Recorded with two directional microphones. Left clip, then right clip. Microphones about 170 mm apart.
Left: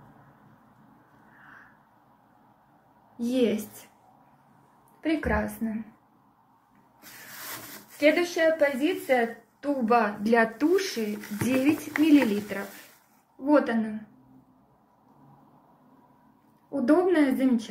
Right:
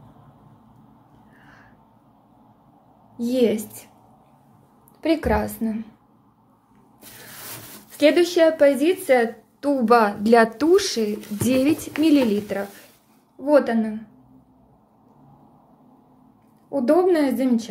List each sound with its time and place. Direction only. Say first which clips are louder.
3.2 s speech: right 5 dB; 20° right (ahead or behind)
5.0 s a woman's voice: right 6 dB; 30° right (ahead or behind)
8.0 s a woman's voice: right 6 dB; 50° right (ahead or behind)
10.2 s speech: right 7 dB; 25° right (ahead or behind)
16.7 s a woman's voice: right 5 dB; 15° right (ahead or behind)